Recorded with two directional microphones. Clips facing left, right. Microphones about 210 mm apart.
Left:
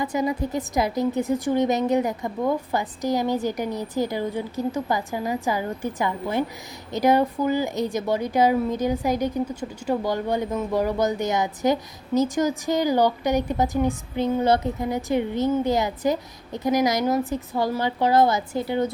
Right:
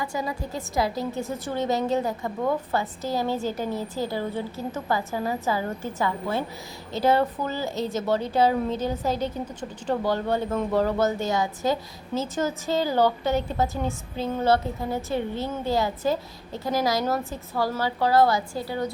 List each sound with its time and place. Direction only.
0.0 s a woman's voice: 20° left (ahead or behind)